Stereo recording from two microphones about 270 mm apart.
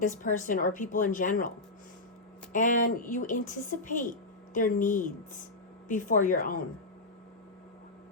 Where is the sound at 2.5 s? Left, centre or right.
Left.